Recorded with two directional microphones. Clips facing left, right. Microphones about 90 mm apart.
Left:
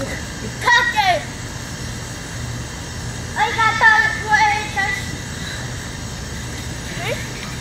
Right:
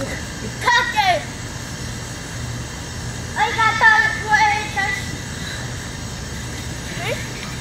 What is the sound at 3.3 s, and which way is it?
Music, 20° left (ahead or behind).